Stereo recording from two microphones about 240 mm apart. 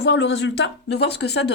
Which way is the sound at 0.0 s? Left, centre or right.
Left.